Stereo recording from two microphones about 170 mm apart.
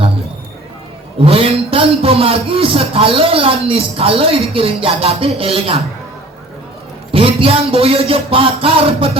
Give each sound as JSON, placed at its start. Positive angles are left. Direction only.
{"t": 1.2, "sound": "a man's voice", "side_deg": -35}
{"t": 7.1, "sound": "a man's voice", "side_deg": -30}